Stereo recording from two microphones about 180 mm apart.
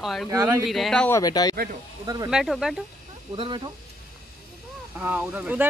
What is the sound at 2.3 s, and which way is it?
Speech, 5° right (ahead or behind).